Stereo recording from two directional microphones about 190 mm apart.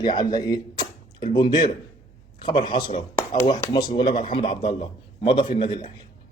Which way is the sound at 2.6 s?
25° left (ahead or behind).